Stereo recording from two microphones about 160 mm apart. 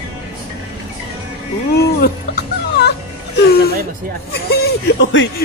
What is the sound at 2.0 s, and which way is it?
Dog, 90° left.